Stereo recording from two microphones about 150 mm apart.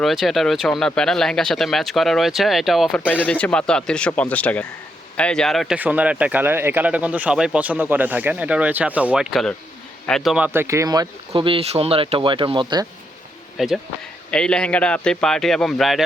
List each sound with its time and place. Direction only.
0.0 s speech: centre (ahead or behind)
3.1 s speech: 10° left (ahead or behind)
5.7 s speech: 10° right (ahead or behind)
10.3 s speech: 10° right (ahead or behind)
11.3 s speech: 35° right (ahead or behind)
13.6 s speech: centre (ahead or behind)